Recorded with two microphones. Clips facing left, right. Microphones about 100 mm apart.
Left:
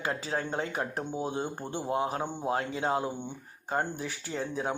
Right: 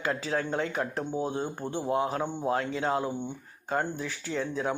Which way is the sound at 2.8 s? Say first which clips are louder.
Right 1 dB; 30° left (ahead or behind).